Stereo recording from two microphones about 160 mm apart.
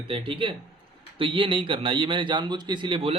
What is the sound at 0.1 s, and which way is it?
A man's voice, 30° right (ahead or behind).